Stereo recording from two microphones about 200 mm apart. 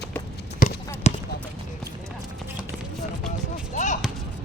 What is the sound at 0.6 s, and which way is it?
Clip-clop, 45° left (ahead or behind).